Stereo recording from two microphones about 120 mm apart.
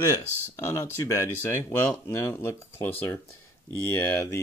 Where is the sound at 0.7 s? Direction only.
25° left (ahead or behind).